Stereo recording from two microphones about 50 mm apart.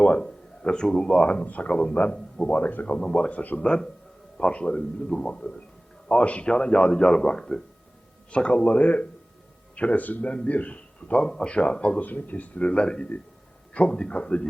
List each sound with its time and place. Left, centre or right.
0.0 s a man's voice: left
2.6 s a man's voice: left
3.6 s a man's voice: centre
12.0 s speech: left
12.6 s a man's voice: centre